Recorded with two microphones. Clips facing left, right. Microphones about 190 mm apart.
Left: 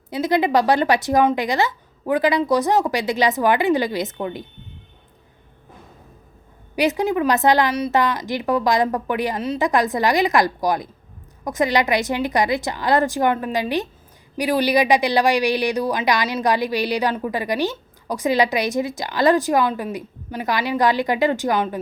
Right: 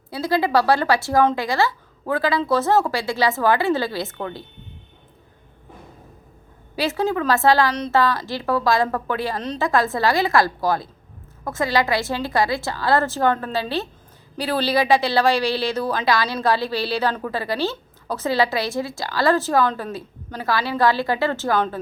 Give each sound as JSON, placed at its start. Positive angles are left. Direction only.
{"t": 0.1, "sound": "speech", "side_deg": 20}
{"t": 6.7, "sound": "speech", "side_deg": 15}